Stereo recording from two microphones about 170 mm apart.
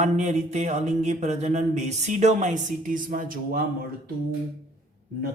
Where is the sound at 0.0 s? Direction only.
45° right (ahead or behind).